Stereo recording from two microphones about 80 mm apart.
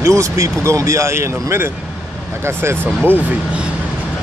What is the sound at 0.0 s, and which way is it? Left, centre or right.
Speech, right.